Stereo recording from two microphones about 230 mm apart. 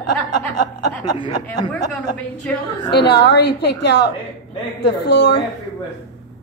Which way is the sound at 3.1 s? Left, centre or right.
Left.